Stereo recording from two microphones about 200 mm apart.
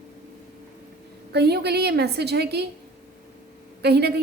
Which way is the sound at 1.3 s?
55° right (ahead or behind).